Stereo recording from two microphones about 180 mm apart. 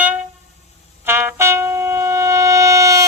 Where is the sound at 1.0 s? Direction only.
10° right (ahead or behind).